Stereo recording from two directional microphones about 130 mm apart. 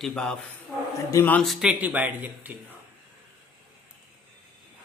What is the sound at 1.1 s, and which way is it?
Speech, 15° left (ahead or behind).